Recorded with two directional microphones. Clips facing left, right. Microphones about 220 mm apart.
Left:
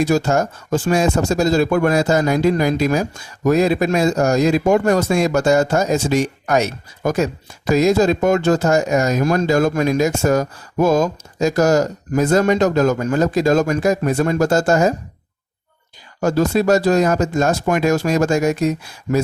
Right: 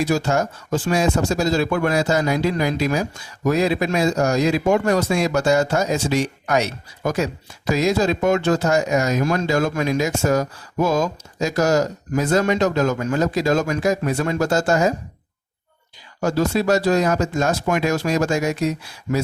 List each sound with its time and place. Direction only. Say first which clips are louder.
0.1 s speech: left 3 dB; 45° left (ahead or behind)
16.2 s speech: left 3 dB; 45° left (ahead or behind)